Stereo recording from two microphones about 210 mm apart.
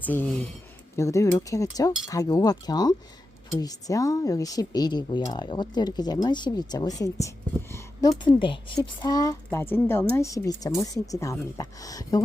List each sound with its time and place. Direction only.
0.0 s speech: 10° left (ahead or behind)